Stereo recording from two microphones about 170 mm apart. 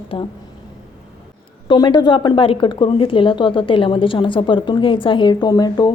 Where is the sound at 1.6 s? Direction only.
25° left (ahead or behind).